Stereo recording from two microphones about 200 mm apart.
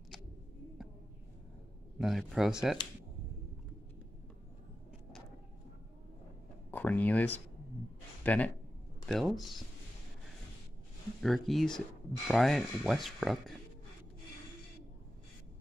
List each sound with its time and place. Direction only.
2.0 s speech: centre (ahead or behind)
6.7 s speech: 10° left (ahead or behind)
11.2 s speech: centre (ahead or behind)